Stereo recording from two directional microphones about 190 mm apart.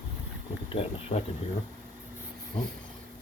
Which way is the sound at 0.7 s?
30° left (ahead or behind).